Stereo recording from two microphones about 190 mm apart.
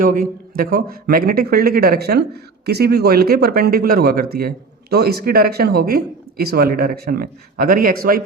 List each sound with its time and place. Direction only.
0.0 s speech: 45° right (ahead or behind)